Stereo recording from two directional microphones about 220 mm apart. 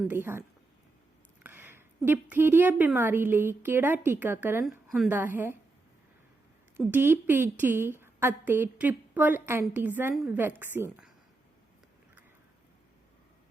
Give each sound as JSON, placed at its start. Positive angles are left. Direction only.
{"t": 0.1, "sound": "a woman's voice", "side_deg": -10}
{"t": 1.5, "sound": "a sound", "side_deg": -10}
{"t": 2.3, "sound": "a woman's voice", "side_deg": -10}
{"t": 6.7, "sound": "a woman's voice", "side_deg": -10}